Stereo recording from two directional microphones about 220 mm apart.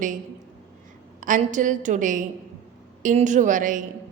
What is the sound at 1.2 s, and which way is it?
A woman's voice, 35° right (ahead or behind).